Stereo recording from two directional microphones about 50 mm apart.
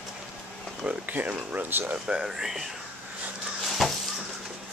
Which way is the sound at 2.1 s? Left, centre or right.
Centre.